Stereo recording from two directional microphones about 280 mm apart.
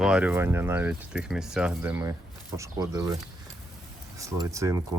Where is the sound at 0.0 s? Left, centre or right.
Centre.